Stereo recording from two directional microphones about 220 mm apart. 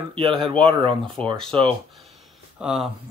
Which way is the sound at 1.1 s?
5° left (ahead or behind).